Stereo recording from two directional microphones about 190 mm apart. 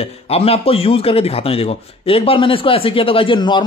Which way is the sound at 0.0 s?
30° left (ahead or behind).